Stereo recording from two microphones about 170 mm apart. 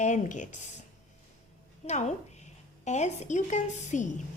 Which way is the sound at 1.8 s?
40° left (ahead or behind).